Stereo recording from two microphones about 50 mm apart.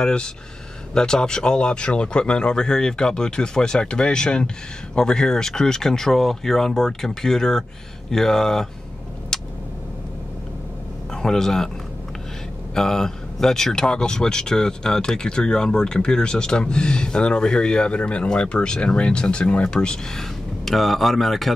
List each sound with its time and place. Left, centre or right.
0.0 s speech: centre
9.3 s tick: centre
11.1 s speech: centre
12.7 s speech: centre
20.6 s speech: centre